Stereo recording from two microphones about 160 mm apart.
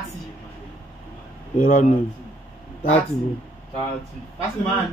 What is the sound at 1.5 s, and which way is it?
Speech, 45° left (ahead or behind).